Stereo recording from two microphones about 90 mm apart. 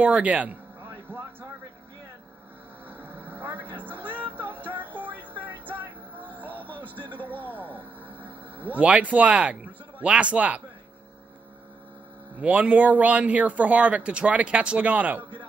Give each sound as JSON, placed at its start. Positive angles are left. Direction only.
{"t": 0.0, "sound": "speech", "side_deg": -15}
{"t": 2.9, "sound": "vehicle", "side_deg": -20}
{"t": 3.8, "sound": "music", "side_deg": -20}
{"t": 6.2, "sound": "music", "side_deg": 20}
{"t": 6.8, "sound": "a sound", "side_deg": -20}
{"t": 7.2, "sound": "a sound", "side_deg": 20}
{"t": 7.7, "sound": "music", "side_deg": -20}
{"t": 8.7, "sound": "speech", "side_deg": -15}
{"t": 12.4, "sound": "speech", "side_deg": -15}